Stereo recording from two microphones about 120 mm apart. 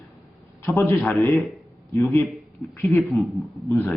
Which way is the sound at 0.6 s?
25° left (ahead or behind).